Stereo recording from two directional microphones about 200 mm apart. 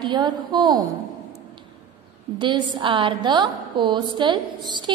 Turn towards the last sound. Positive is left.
turn(degrees=-25)  # may be behind; listen again after turning